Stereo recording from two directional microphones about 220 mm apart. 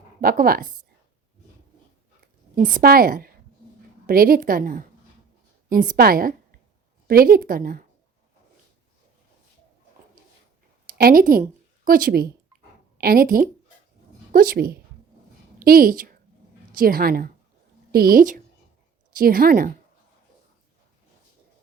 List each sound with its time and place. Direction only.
0.2 s a woman's voice: 40° right (ahead or behind)
2.6 s a woman's voice: 40° right (ahead or behind)
10.9 s a woman's voice: 40° right (ahead or behind)